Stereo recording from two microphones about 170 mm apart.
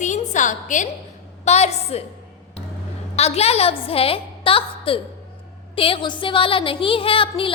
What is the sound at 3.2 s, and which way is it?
A woman's voice, 40° left (ahead or behind).